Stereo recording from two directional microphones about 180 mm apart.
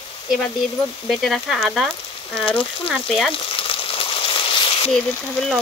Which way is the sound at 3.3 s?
30° left (ahead or behind).